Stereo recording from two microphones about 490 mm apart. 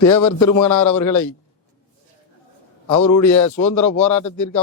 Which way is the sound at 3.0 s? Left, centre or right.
Left.